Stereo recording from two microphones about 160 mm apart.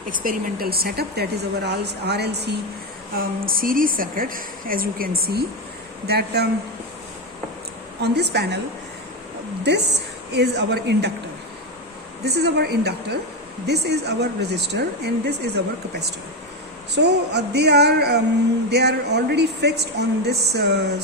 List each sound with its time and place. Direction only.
0.1 s speech: 60° right (ahead or behind); by 2.6 s 90° right
3.2 s a woman's voice: 65° right (ahead or behind); by 6.5 s 85° right
8.0 s speech: 90° right
9.7 s speech: 90° right
12.2 s speech: 90° right